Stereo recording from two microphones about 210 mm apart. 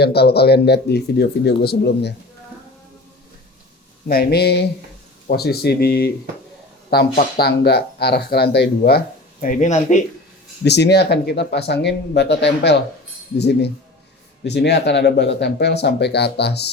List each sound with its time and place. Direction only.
0.0 s speech: 50° left (ahead or behind)
4.1 s speech: 50° left (ahead or behind)
7.2 s speech: 50° left (ahead or behind)
9.4 s speech: 40° left (ahead or behind)
10.6 s speech: 55° left (ahead or behind)